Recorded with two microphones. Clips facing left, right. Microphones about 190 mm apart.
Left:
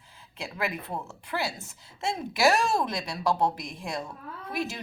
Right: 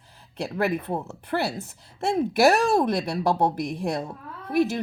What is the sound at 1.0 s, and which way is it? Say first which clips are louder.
Speech: right 5 dB; 60° right (ahead or behind).